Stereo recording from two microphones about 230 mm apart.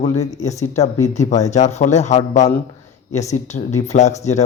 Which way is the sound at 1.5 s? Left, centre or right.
Left.